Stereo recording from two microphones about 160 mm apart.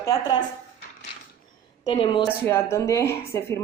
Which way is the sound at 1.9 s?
30° left (ahead or behind).